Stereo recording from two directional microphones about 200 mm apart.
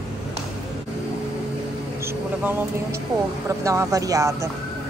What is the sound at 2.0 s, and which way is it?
Mouse, 10° right (ahead or behind).